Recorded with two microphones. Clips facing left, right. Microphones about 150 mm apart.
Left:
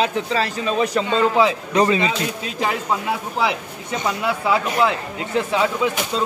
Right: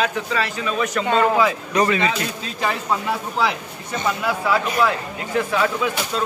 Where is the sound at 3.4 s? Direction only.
15° left (ahead or behind).